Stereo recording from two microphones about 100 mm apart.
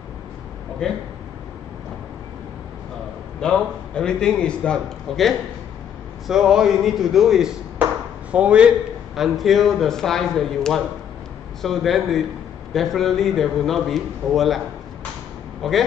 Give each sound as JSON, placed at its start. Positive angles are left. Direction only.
{"t": 0.8, "sound": "a man's voice", "side_deg": 10}
{"t": 3.3, "sound": "a man's voice", "side_deg": 5}
{"t": 6.2, "sound": "speech", "side_deg": -5}
{"t": 15.6, "sound": "speech", "side_deg": 5}